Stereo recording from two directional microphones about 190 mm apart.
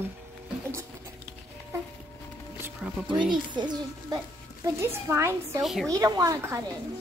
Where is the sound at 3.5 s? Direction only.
20° right (ahead or behind).